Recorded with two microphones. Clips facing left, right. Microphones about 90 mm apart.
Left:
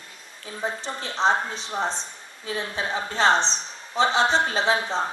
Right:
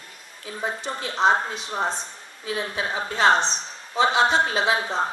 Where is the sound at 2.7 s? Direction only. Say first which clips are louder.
Left 1 dB; 30° left (ahead or behind).